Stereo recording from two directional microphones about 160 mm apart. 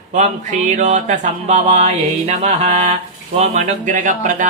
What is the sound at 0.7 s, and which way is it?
Music, 45° right (ahead or behind).